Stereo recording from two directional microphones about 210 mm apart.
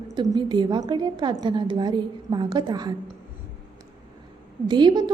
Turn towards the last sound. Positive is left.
turn(degrees=-20)  # may be behind; listen again after turning